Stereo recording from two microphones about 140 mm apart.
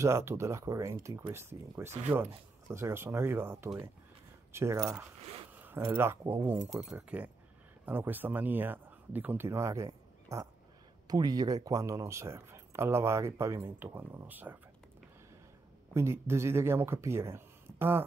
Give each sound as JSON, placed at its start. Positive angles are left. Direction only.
{"t": 0.0, "sound": "speech", "side_deg": -20}
{"t": 15.9, "sound": "speech", "side_deg": -20}